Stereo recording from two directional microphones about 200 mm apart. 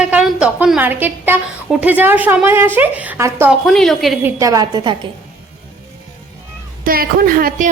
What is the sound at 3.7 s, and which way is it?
Speech, centre (ahead or behind).